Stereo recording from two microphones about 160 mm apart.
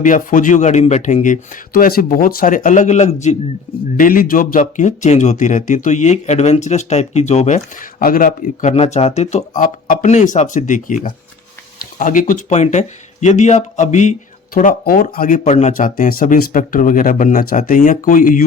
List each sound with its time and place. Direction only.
0.0 s a man's voice: 55° left (ahead or behind)
3.9 s a man's voice: 60° left (ahead or behind)
8.7 s a man's voice: 40° left (ahead or behind); by 18.4 s 55° left (ahead or behind)